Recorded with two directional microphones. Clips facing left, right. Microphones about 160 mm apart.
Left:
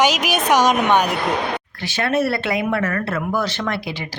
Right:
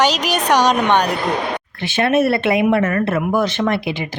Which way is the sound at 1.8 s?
20° right (ahead or behind).